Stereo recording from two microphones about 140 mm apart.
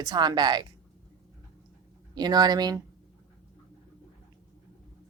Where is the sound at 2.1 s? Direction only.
30° right (ahead or behind).